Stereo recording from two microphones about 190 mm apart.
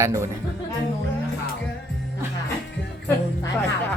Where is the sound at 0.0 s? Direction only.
15° right (ahead or behind).